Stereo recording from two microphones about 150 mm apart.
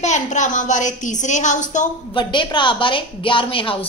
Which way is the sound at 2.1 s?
30° left (ahead or behind).